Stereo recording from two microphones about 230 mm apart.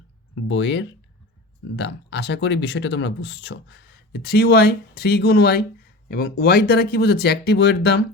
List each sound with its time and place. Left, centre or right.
0.4 s speech: left